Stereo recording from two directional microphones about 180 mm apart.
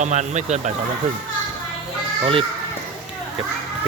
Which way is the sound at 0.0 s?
40° right (ahead or behind).